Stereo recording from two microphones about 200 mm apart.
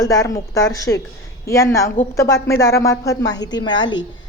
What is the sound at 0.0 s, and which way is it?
A woman's voice, 15° left (ahead or behind).